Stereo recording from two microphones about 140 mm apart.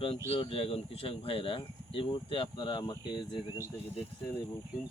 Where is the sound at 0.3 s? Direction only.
40° left (ahead or behind).